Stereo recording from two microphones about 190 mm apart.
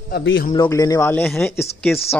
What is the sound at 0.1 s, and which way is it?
Speech, 70° left (ahead or behind).